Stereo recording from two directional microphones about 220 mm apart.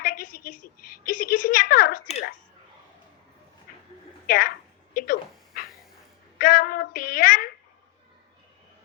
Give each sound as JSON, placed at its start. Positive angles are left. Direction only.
{"t": 0.0, "sound": "a woman's voice", "side_deg": 40}
{"t": 4.3, "sound": "a woman's voice", "side_deg": 40}
{"t": 4.9, "sound": "dog", "side_deg": 40}
{"t": 6.4, "sound": "a sound", "side_deg": 40}